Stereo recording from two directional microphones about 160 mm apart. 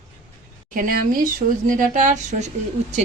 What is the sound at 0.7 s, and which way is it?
Speech, 60° right (ahead or behind).